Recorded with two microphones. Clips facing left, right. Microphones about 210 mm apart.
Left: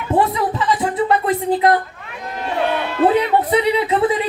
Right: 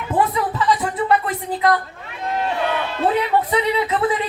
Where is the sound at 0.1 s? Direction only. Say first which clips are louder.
Left 3 dB; 30° left (ahead or behind).